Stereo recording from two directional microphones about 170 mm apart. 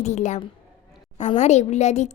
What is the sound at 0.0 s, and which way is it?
A woman's voice, 45° left (ahead or behind).